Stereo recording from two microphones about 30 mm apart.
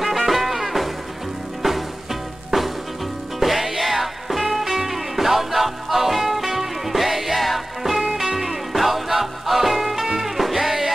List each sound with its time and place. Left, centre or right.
0.0 s music: centre
2.5 s music: centre
3.3 s music: centre